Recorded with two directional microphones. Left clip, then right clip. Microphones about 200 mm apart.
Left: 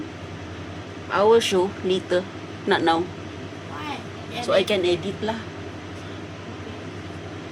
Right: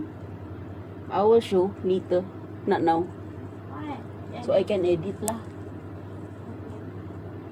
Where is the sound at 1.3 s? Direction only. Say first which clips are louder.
Left 2 dB; 10° left (ahead or behind).